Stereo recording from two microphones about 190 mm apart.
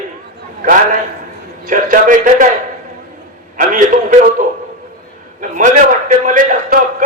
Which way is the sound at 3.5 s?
45° right (ahead or behind).